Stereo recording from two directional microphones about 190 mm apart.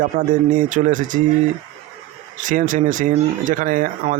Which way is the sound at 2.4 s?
45° right (ahead or behind).